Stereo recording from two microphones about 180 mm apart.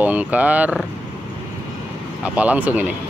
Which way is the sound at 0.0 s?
10° right (ahead or behind).